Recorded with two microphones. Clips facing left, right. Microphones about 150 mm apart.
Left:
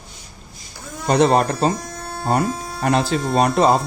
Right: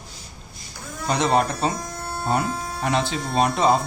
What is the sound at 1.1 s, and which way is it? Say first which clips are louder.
Speech: left 5 dB; 35° left (ahead or behind).